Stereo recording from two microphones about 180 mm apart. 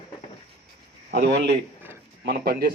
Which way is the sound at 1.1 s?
65° right (ahead or behind).